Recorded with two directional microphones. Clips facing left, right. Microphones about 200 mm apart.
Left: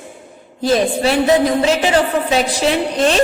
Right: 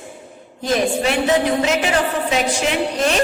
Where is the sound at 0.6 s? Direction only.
35° left (ahead or behind).